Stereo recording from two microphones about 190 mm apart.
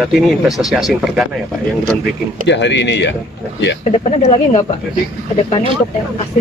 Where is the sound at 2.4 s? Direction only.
70° left (ahead or behind).